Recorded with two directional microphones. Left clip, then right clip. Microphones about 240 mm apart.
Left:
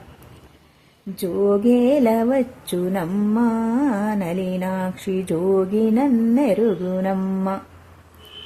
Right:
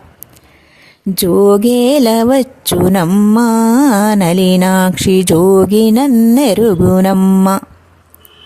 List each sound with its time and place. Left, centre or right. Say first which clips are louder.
1.2 s music: right 10 dB; right